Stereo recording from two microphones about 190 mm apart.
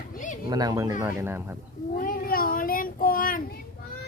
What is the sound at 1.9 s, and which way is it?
Speech, 50° left (ahead or behind).